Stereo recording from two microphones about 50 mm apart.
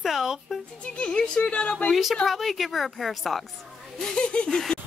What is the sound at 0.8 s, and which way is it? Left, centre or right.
Speech, left.